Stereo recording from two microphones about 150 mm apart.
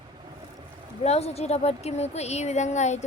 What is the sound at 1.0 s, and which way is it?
Speech, 45° left (ahead or behind).